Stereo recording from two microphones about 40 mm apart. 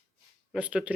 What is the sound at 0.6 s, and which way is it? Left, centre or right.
Speech, right.